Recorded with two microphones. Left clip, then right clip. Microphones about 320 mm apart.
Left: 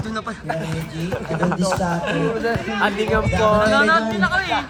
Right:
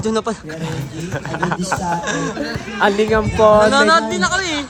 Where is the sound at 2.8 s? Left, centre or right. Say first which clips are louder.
Right 7 dB; right.